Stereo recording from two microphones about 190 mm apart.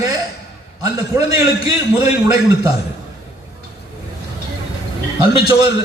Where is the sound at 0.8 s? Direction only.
20° right (ahead or behind).